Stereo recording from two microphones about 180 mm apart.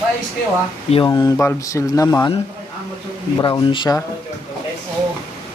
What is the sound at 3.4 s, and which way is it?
Speech, 25° left (ahead or behind).